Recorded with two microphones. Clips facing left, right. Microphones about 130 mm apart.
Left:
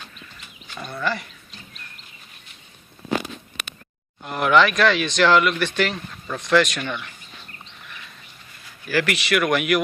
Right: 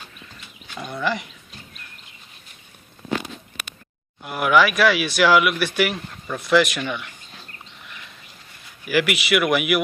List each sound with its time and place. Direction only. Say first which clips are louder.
0.8 s speech: right 1 dB; 15° right (ahead or behind)
4.2 s speech: even; 5° right (ahead or behind)
8.8 s speech: right 2 dB; 15° right (ahead or behind)